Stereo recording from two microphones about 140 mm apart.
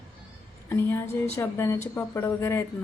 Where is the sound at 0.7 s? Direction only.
15° left (ahead or behind).